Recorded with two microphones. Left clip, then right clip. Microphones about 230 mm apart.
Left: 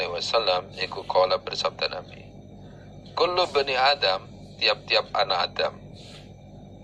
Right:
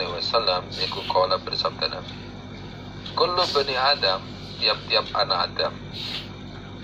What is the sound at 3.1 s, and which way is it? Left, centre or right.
A man's voice, left.